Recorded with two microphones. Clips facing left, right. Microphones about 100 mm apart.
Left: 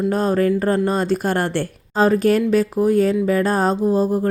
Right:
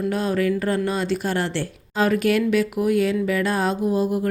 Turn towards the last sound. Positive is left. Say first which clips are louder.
# left 4 dB
turn(degrees=35)  # may be behind; listen again after turning